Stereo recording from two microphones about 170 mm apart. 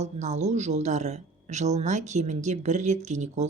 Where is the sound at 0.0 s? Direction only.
40° right (ahead or behind).